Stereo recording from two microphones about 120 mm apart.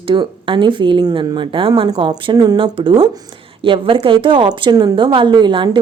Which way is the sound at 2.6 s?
50° right (ahead or behind).